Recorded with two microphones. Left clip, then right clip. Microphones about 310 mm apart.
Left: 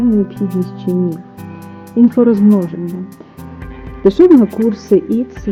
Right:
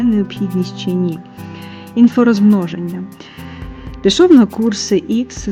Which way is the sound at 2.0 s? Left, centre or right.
Right.